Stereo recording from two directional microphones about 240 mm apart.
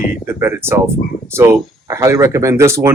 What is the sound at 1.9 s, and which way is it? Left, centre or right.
Speech, centre.